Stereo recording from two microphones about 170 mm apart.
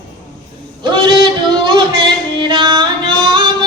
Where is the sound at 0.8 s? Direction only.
25° right (ahead or behind).